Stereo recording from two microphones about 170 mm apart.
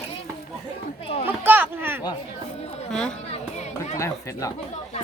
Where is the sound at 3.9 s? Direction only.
15° left (ahead or behind).